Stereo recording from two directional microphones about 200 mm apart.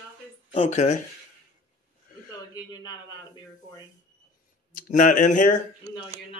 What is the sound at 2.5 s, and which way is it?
Speech, 20° left (ahead or behind).